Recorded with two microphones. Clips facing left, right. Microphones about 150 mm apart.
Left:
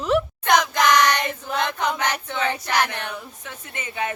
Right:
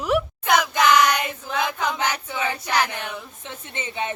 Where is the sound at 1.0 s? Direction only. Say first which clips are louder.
Even; 10° right (ahead or behind).